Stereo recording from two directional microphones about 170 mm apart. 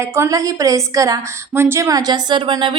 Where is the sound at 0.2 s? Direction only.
20° right (ahead or behind).